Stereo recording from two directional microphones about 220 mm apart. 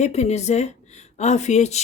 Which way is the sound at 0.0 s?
30° left (ahead or behind).